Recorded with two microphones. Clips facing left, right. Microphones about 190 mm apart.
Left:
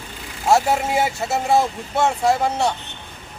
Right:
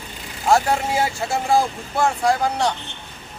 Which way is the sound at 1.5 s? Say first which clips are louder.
Left 1 dB; 25° left (ahead or behind).